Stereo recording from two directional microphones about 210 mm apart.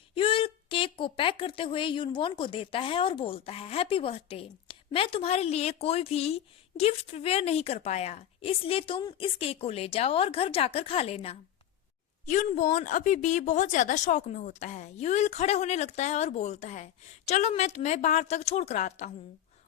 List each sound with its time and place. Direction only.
0.1 s a woman's voice: 25° left (ahead or behind)